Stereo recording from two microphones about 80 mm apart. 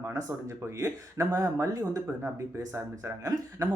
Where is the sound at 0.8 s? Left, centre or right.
Right.